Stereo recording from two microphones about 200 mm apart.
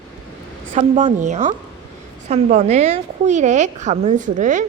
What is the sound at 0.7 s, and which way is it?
A woman's voice, 35° right (ahead or behind).